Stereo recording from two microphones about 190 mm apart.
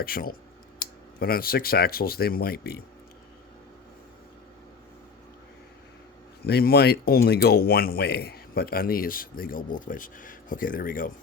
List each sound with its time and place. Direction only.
0.0 s speech: 50° left (ahead or behind)
6.4 s speech: 55° left (ahead or behind)